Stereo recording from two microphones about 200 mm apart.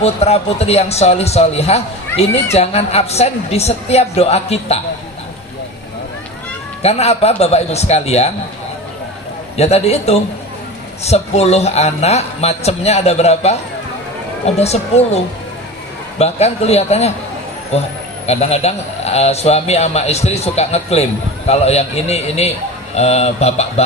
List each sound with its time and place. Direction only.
0.0 s speech: 30° left (ahead or behind)
6.8 s speech: 30° left (ahead or behind)
9.6 s speech: 30° left (ahead or behind)